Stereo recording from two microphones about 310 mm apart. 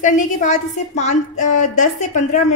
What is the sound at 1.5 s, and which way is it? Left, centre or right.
Speech, left.